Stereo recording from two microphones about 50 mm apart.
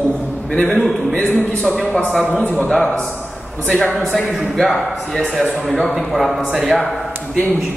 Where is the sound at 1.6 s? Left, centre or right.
Centre.